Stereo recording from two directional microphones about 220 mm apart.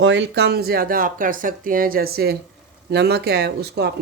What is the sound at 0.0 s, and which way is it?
Speech, 55° right (ahead or behind).